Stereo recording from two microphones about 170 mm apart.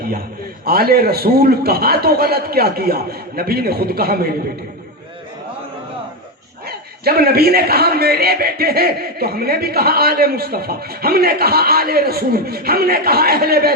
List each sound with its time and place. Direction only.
0.6 s a man's voice: 65° right (ahead or behind)
6.7 s a man's voice: 65° right (ahead or behind)